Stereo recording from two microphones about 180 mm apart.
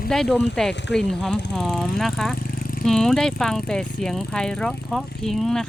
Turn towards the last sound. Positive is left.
turn(degrees=5)  # may be behind; listen again after turning